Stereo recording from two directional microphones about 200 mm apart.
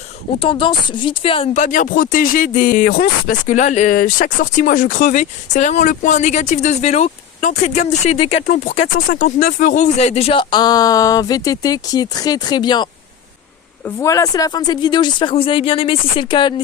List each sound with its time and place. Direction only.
0.3 s speech: 25° left (ahead or behind)